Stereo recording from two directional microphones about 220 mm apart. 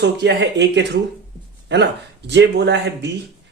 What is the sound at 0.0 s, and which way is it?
Speech, 50° right (ahead or behind).